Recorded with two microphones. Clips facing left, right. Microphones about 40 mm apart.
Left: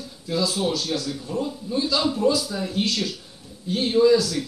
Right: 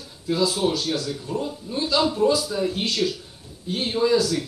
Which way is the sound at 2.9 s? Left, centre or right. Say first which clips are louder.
Right 2 dB; right.